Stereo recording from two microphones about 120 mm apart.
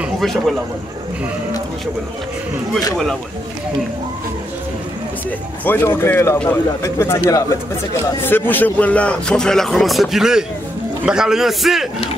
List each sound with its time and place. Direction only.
0.2 s a man's voice: centre (ahead or behind)
5.7 s speech: 20° left (ahead or behind)
8.2 s a man's voice: 15° left (ahead or behind); by 11.9 s centre (ahead or behind)